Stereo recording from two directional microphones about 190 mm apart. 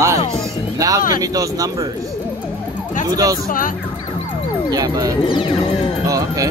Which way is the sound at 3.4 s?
45° left (ahead or behind).